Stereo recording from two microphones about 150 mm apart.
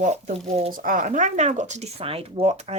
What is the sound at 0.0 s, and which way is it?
Speech, 55° right (ahead or behind).